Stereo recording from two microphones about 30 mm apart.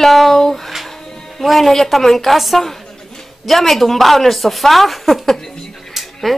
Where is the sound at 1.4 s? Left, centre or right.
Centre.